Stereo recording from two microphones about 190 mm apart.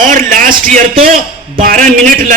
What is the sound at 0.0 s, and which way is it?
A man's voice, 45° right (ahead or behind).